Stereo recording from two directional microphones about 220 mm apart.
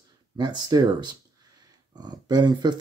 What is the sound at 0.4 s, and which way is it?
Speech, 20° right (ahead or behind).